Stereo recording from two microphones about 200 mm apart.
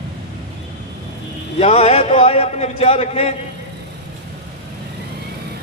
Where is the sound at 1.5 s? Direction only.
30° left (ahead or behind).